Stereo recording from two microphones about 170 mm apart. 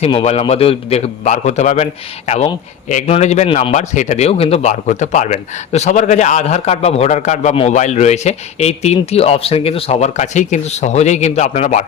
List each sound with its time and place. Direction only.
0.0 s a man's voice: 35° left (ahead or behind)